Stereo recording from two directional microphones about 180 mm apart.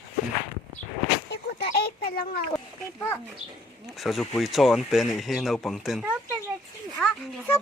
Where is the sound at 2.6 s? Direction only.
10° left (ahead or behind).